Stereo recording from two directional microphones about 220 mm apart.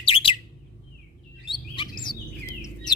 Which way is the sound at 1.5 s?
20° left (ahead or behind).